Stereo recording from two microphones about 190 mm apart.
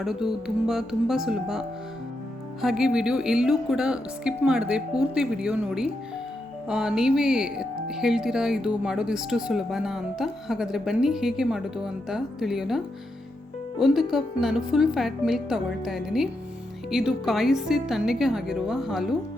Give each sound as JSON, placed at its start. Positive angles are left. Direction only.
{"t": 0.0, "sound": "speech", "side_deg": 0}